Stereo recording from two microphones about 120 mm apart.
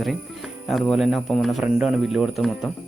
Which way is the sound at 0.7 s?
Centre (ahead or behind).